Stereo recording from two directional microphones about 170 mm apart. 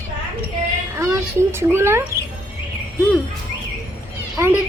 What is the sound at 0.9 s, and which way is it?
Speech, 15° right (ahead or behind).